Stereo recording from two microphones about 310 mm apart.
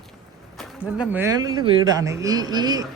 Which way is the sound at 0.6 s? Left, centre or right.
Centre.